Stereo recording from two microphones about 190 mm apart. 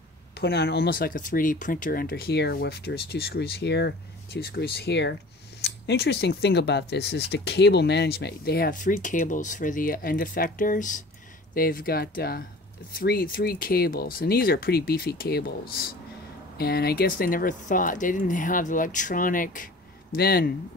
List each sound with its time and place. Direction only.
0.4 s speech: 55° left (ahead or behind)